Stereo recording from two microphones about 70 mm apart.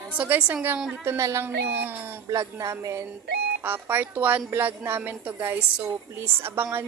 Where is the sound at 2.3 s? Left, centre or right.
Right.